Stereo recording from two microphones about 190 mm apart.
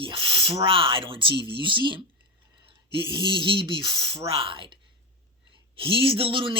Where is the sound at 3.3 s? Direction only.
25° right (ahead or behind).